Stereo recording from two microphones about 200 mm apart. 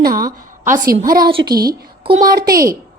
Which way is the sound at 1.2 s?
25° right (ahead or behind).